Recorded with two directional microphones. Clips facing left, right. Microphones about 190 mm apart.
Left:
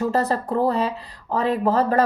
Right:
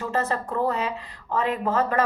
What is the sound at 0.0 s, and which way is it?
A woman's voice, 35° left (ahead or behind).